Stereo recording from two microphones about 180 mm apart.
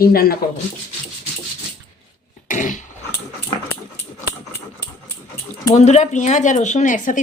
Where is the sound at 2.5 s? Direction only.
45° left (ahead or behind).